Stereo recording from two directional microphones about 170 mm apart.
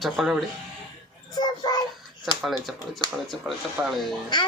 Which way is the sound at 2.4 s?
Centre (ahead or behind).